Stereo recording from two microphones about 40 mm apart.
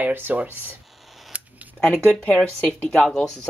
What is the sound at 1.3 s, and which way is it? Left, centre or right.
Scissors, right.